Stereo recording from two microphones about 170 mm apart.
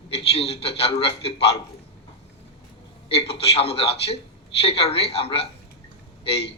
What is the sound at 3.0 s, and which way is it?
A man's voice, 35° left (ahead or behind).